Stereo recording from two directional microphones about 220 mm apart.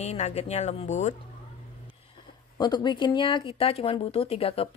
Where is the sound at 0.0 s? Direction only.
30° left (ahead or behind).